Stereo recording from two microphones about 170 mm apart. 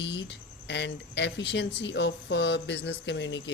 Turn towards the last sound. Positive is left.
turn(degrees=90)